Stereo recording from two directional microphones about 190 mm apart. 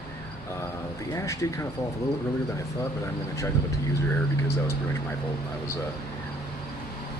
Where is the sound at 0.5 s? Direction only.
15° left (ahead or behind).